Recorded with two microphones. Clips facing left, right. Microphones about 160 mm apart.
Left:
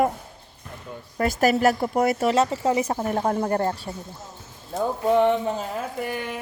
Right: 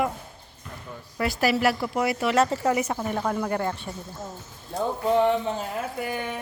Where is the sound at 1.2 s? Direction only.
45° left (ahead or behind).